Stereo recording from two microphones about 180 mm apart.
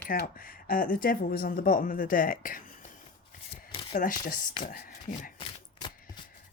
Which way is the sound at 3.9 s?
50° left (ahead or behind).